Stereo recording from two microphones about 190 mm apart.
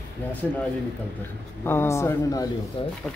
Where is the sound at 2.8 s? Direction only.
30° left (ahead or behind).